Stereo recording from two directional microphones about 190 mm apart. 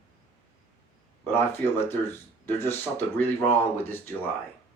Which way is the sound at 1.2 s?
10° left (ahead or behind).